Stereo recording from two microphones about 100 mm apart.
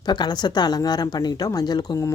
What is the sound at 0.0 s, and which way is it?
Speech, 45° left (ahead or behind).